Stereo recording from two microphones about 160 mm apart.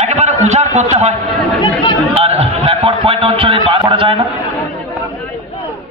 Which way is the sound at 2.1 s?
40° right (ahead or behind).